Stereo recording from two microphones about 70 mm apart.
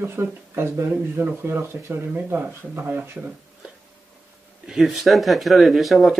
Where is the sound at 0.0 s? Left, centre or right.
Right.